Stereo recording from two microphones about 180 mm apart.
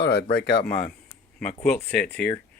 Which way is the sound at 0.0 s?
60° left (ahead or behind).